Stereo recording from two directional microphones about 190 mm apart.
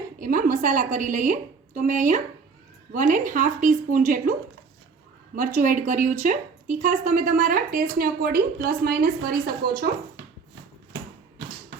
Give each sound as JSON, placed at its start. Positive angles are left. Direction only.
{"t": 0.2, "sound": "a woman's voice", "side_deg": -45}